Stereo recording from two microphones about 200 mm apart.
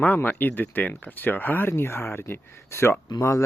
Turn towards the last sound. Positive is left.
turn(degrees=15)  # may be behind; listen again after turning